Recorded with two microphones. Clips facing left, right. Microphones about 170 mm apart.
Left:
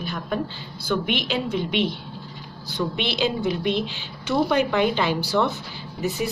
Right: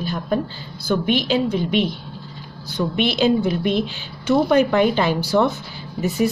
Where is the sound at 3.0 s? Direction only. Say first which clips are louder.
Right 9 dB; 45° right (ahead or behind).